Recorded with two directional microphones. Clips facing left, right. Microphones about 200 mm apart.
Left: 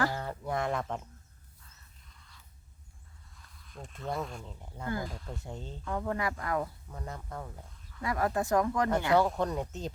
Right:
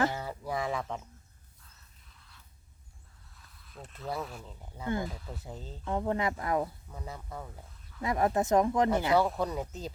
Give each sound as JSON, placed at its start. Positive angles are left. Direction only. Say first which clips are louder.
{"t": 0.1, "sound": "a sound", "louder": "left 1 dB", "side_deg": -5}
{"t": 3.3, "sound": "speech", "louder": "left 1 dB", "side_deg": 0}
{"t": 5.8, "sound": "speech", "louder": "right 3 dB", "side_deg": -20}
{"t": 6.9, "sound": "speech", "louder": "left 1 dB", "side_deg": -5}
{"t": 8.0, "sound": "speech", "louder": "right 2 dB", "side_deg": -20}
{"t": 9.1, "sound": "speech", "louder": "left 1 dB", "side_deg": 0}